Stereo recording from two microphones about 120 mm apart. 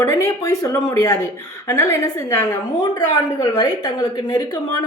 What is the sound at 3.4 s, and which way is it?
A woman's voice, 35° left (ahead or behind).